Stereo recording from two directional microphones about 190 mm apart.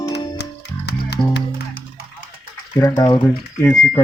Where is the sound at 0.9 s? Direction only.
60° left (ahead or behind).